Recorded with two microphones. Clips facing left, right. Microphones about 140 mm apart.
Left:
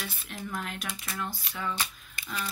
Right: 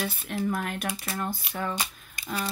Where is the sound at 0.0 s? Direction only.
50° right (ahead or behind).